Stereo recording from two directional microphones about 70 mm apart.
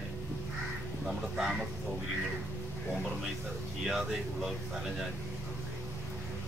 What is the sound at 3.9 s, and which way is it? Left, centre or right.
Speech, centre.